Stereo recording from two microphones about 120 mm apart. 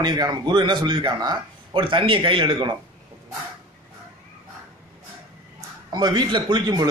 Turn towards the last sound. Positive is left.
turn(degrees=-35)  # may be behind; listen again after turning